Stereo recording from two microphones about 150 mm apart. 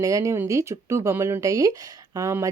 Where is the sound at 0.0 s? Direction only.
20° right (ahead or behind).